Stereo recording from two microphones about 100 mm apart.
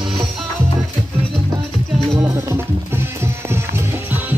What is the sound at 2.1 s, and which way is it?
Music, 25° right (ahead or behind).